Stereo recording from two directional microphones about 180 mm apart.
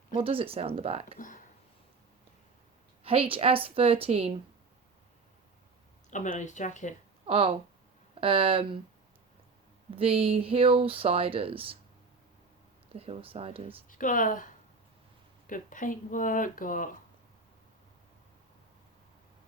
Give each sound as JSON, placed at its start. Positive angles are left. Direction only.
{"t": 0.1, "sound": "speech", "side_deg": -30}
{"t": 3.0, "sound": "speech", "side_deg": -30}
{"t": 6.1, "sound": "speech", "side_deg": 45}
{"t": 7.3, "sound": "speech", "side_deg": -30}
{"t": 9.9, "sound": "speech", "side_deg": -30}
{"t": 12.9, "sound": "speech", "side_deg": -35}
{"t": 13.9, "sound": "speech", "side_deg": 50}
{"t": 15.4, "sound": "speech", "side_deg": 45}